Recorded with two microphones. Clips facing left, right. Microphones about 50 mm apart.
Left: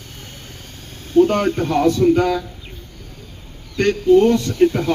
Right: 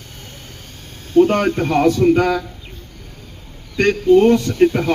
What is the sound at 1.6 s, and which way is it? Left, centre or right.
Speech, right.